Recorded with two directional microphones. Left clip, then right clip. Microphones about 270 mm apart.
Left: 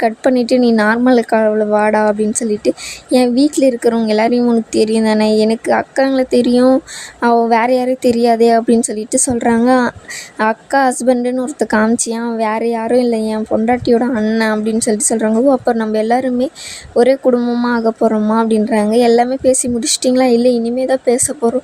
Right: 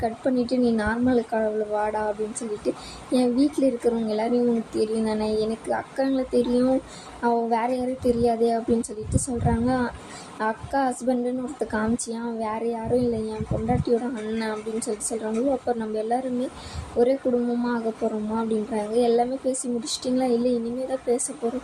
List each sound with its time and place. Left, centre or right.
0.0 s a woman's voice: left